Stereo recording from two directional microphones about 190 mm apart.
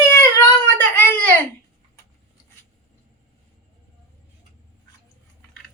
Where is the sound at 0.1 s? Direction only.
10° left (ahead or behind).